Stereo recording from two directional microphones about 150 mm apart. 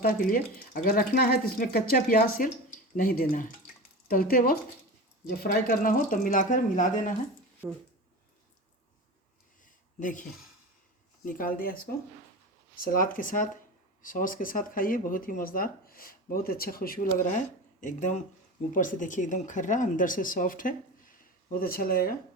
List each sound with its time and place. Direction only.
0.0 s speech: 75° left (ahead or behind)
7.6 s speech: 5° right (ahead or behind)
10.0 s speech: 60° left (ahead or behind)
11.3 s speech: 65° left (ahead or behind); by 22.1 s 80° left